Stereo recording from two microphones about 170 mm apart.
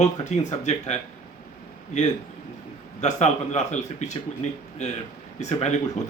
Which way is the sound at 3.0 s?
40° left (ahead or behind).